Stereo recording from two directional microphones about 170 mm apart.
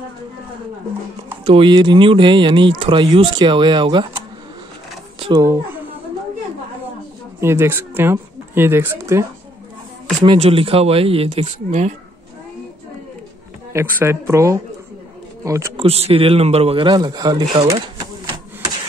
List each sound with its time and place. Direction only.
1.4 s speech: 30° right (ahead or behind)
5.2 s speech: 20° right (ahead or behind)
7.3 s speech: 15° right (ahead or behind)
10.2 s speech: 35° right (ahead or behind)
13.7 s speech: 15° right (ahead or behind)
15.7 s speech: 35° right (ahead or behind)